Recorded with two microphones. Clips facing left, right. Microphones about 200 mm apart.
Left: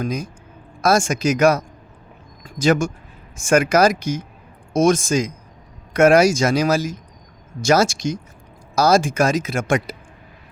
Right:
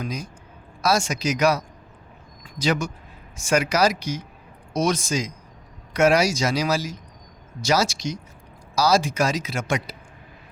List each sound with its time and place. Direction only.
0.0 s speech: 50° left (ahead or behind)